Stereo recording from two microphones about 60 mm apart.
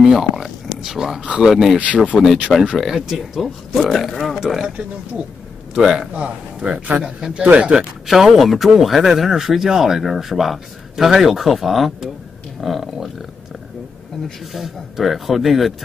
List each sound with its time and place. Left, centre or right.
0.0 s speech: centre
2.7 s speech: centre
5.8 s a man's voice: centre
6.1 s a man's voice: centre
8.1 s speech: centre